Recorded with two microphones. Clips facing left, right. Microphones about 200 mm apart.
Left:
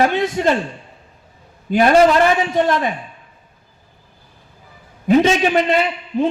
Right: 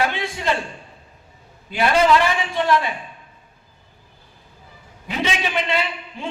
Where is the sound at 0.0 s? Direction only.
45° left (ahead or behind).